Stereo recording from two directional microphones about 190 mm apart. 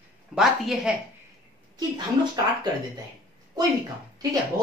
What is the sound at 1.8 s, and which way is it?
Speech, 20° right (ahead or behind).